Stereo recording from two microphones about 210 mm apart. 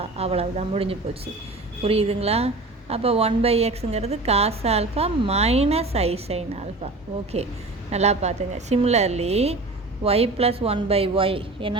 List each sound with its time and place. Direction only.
0.0 s a woman's voice: 30° right (ahead or behind)
7.9 s a woman's voice: 30° right (ahead or behind)